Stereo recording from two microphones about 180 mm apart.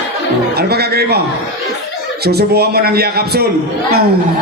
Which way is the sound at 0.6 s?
60° right (ahead or behind).